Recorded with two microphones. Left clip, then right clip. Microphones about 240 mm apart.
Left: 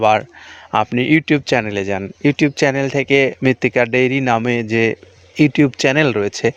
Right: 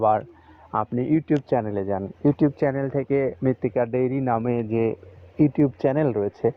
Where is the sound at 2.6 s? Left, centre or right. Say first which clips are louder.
Left 8 dB; left.